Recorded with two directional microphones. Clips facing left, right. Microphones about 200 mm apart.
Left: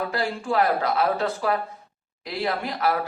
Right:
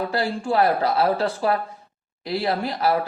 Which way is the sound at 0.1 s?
30° right (ahead or behind).